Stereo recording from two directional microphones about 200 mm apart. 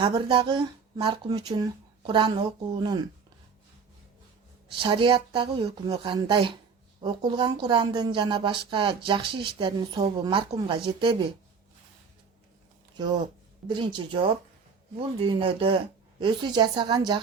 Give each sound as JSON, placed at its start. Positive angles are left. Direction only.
{"t": 0.0, "sound": "a woman's voice", "side_deg": -25}
{"t": 4.7, "sound": "a woman's voice", "side_deg": -25}
{"t": 13.7, "sound": "a woman's voice", "side_deg": -25}